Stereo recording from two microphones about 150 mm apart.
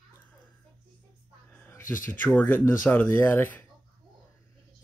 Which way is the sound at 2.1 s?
15° left (ahead or behind).